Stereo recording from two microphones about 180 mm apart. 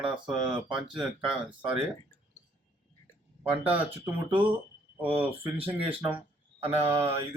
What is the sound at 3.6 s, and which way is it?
Speech, 10° right (ahead or behind).